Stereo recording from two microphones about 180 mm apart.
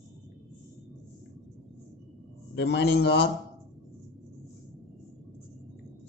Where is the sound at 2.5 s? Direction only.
70° left (ahead or behind).